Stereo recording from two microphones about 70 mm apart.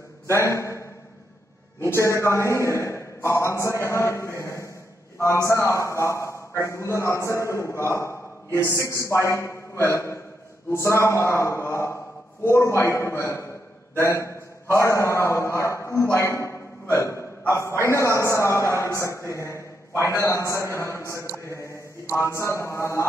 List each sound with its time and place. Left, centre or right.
0.3 s a man's voice: left
1.9 s a man's voice: left
8.6 s a man's voice: left
16.9 s a sound: left
17.5 s a man's voice: left